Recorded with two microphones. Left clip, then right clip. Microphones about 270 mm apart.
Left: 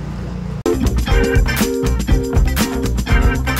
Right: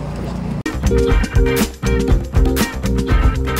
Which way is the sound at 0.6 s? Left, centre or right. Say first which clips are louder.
Right 1 dB; centre.